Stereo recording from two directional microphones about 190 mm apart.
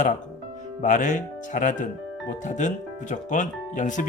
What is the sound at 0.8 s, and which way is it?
Speech, 40° left (ahead or behind).